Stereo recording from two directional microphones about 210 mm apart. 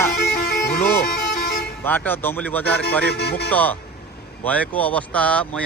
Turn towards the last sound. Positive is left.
turn(degrees=5)  # may be behind; listen again after turning